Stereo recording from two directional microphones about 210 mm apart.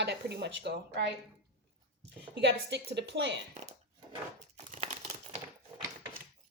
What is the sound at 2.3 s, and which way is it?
A woman's voice, 55° right (ahead or behind).